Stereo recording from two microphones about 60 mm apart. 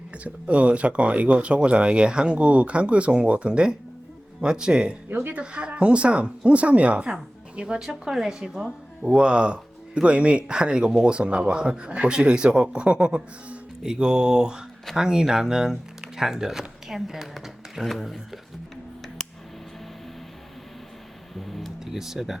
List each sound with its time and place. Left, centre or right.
0.3 s speech: centre
5.0 s speech: right
5.3 s speech: centre
21.3 s music: centre